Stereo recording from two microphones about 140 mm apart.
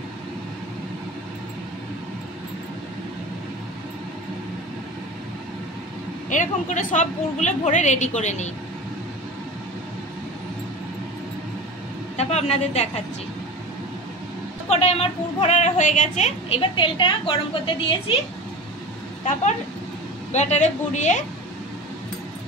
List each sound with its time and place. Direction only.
6.2 s a woman's voice: 65° left (ahead or behind)
12.2 s a woman's voice: 50° left (ahead or behind)
14.7 s a woman's voice: 45° left (ahead or behind); by 16.3 s 65° left (ahead or behind)
16.4 s a woman's voice: 40° left (ahead or behind)
20.3 s a woman's voice: 55° left (ahead or behind)